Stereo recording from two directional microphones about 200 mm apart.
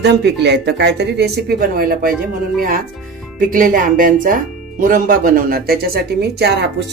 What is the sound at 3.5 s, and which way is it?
Speech, 45° right (ahead or behind).